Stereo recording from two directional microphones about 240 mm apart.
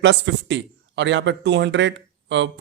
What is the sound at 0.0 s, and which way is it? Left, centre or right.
A man's voice, right.